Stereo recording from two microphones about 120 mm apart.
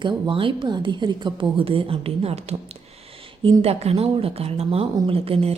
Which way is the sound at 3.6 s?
60° right (ahead or behind).